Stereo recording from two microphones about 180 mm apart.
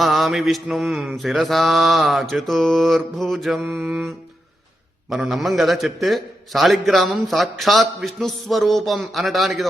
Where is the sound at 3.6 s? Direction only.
10° right (ahead or behind).